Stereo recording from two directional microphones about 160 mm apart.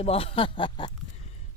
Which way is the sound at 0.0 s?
35° left (ahead or behind).